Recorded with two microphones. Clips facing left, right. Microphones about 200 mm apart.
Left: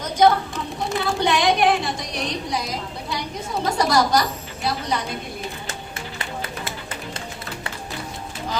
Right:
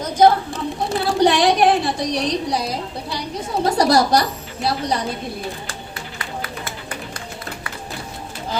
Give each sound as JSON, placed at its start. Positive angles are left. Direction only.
{"t": 0.0, "sound": "speech", "side_deg": -30}